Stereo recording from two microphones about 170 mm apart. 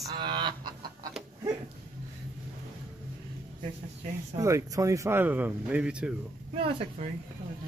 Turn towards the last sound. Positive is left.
turn(degrees=-35)  # may be behind; listen again after turning